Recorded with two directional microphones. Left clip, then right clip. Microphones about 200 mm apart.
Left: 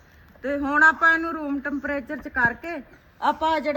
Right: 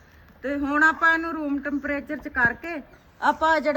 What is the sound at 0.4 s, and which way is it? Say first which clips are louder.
A man's voice: left 3 dB; centre (ahead or behind).